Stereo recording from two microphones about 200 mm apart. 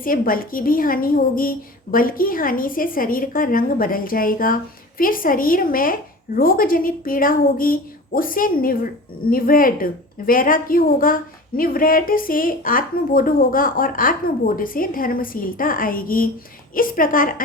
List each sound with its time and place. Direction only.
0.0 s a woman's voice: 45° left (ahead or behind)